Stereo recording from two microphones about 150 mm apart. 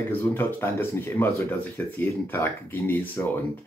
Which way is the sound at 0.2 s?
15° left (ahead or behind).